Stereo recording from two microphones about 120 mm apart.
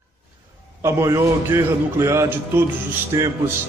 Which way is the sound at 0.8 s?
25° right (ahead or behind).